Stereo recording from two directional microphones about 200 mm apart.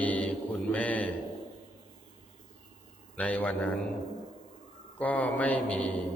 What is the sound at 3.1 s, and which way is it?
Mantra, 5° left (ahead or behind).